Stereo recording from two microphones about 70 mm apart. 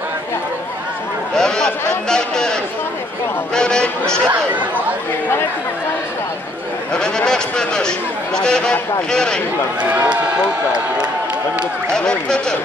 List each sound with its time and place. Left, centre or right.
1.3 s speech: centre
4.3 s speech: right
6.9 s speech: centre
10.0 s speech: centre
11.9 s speech: centre